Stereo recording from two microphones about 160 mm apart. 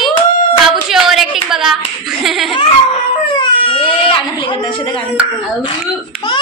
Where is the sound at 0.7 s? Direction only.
Centre (ahead or behind).